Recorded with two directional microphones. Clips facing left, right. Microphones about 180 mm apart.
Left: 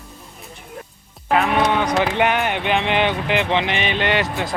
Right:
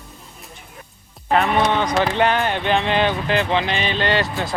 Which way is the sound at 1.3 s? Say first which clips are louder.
Even; 5° left (ahead or behind).